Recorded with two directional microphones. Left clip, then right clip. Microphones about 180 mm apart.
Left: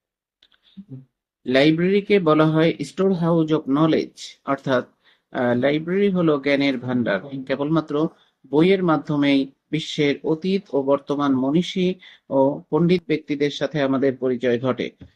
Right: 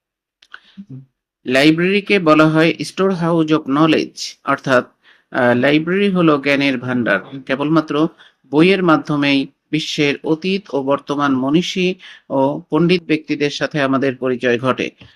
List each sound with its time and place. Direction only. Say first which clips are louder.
1.5 s speech: right 4 dB; 15° right (ahead or behind)